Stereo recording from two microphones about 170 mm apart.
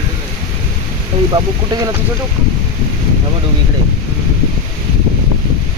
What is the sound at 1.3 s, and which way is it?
Speech, 25° right (ahead or behind).